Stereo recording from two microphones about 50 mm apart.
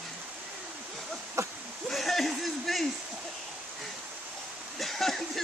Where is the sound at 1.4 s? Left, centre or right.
Right.